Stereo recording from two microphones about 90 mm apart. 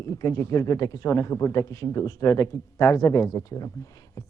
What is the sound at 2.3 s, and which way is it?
A woman's voice, 30° left (ahead or behind).